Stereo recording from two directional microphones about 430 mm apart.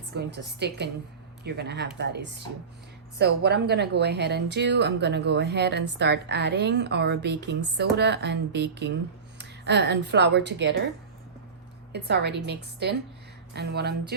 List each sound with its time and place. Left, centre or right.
0.1 s a woman's voice: right
11.9 s a woman's voice: right